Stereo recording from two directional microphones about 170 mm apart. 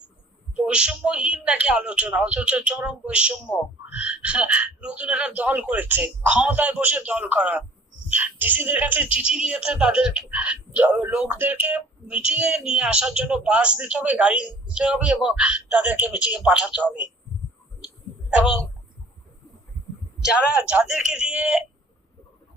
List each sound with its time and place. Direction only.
0.5 s speech: 5° right (ahead or behind)
20.2 s a man's voice: 5° right (ahead or behind)